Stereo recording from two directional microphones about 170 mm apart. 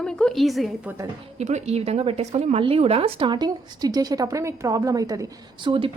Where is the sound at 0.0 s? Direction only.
5° left (ahead or behind).